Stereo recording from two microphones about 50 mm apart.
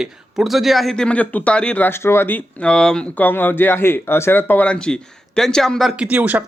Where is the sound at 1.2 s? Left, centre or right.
Left.